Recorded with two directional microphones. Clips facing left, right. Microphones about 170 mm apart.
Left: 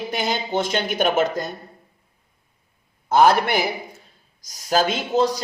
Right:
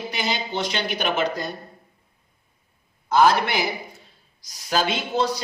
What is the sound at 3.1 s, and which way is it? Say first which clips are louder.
Speech: left 2 dB; 50° left (ahead or behind).